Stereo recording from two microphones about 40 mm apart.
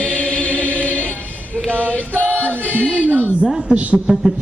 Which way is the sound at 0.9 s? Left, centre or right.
Left.